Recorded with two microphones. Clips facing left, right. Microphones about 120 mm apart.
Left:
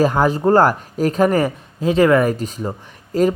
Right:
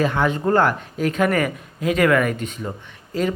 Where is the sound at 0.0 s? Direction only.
40° left (ahead or behind).